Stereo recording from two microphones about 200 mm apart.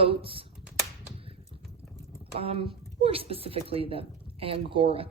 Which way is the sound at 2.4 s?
30° right (ahead or behind).